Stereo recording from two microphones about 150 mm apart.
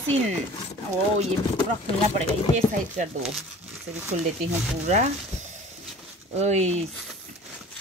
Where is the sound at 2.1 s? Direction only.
50° right (ahead or behind).